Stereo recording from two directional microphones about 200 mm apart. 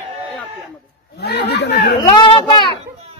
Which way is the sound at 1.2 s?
55° left (ahead or behind).